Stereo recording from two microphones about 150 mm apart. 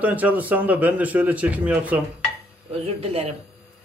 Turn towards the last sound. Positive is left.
turn(degrees=-45)  # may be behind; listen again after turning